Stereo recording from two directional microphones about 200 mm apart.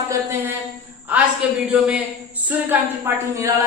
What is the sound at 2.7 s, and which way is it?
Speech, 10° right (ahead or behind).